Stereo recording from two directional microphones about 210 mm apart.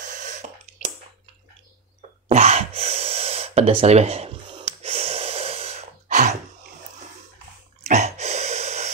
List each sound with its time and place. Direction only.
0.0 s a sound: 35° right (ahead or behind)
2.0 s gasp: 30° right (ahead or behind)
7.9 s gasp: 30° right (ahead or behind)